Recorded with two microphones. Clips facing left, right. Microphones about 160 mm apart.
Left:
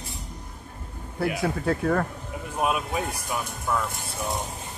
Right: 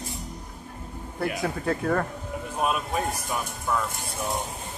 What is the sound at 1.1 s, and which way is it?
Speech, centre (ahead or behind).